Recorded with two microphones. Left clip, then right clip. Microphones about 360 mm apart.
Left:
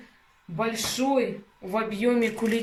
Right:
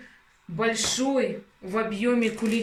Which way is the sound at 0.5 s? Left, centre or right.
Centre.